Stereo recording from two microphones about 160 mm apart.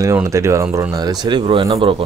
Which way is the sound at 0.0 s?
20° right (ahead or behind).